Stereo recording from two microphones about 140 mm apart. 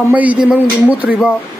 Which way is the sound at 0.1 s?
10° right (ahead or behind).